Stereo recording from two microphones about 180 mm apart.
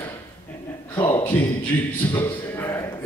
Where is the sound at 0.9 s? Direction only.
15° left (ahead or behind).